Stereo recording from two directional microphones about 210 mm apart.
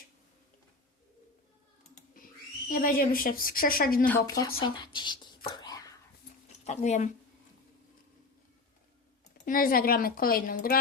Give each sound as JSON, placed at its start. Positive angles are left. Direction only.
{"t": 2.7, "sound": "speech", "side_deg": 40}
{"t": 4.0, "sound": "speech", "side_deg": 10}
{"t": 5.5, "sound": "whispering", "side_deg": 20}
{"t": 6.7, "sound": "a woman's voice", "side_deg": 35}
{"t": 9.4, "sound": "speech", "side_deg": 40}